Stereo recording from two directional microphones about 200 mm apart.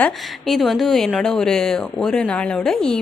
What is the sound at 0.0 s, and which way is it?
Speech, centre (ahead or behind).